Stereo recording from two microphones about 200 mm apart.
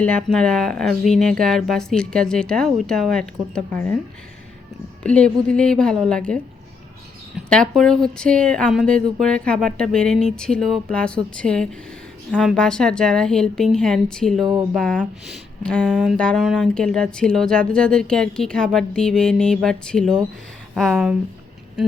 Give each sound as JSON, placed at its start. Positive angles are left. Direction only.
{"t": 0.0, "sound": "speech", "side_deg": 5}
{"t": 5.0, "sound": "speech", "side_deg": 5}
{"t": 7.3, "sound": "a sound", "side_deg": 5}
{"t": 7.8, "sound": "speech", "side_deg": 5}